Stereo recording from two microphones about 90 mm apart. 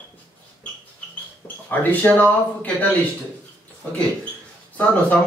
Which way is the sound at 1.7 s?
20° left (ahead or behind).